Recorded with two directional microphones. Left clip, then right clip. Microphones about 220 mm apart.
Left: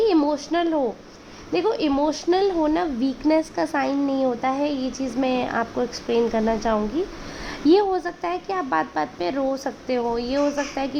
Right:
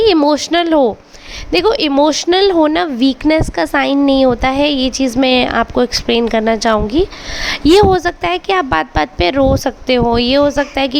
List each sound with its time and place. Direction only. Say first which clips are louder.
0.0 s a woman's voice: right 9 dB; 35° right (ahead or behind)